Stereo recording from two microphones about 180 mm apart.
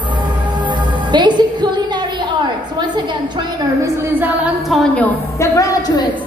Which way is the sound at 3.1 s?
25° right (ahead or behind).